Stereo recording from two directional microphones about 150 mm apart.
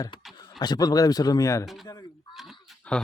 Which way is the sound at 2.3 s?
Centre (ahead or behind).